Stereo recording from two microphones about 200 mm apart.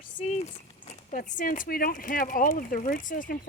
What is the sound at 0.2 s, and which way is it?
Speech, 35° left (ahead or behind).